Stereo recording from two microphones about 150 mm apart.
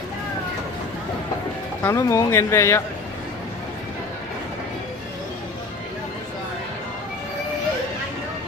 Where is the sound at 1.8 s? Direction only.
20° left (ahead or behind).